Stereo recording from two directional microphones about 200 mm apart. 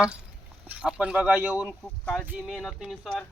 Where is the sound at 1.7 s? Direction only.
5° left (ahead or behind).